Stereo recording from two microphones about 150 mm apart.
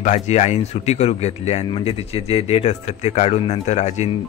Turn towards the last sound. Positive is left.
turn(degrees=50)  # may be behind; listen again after turning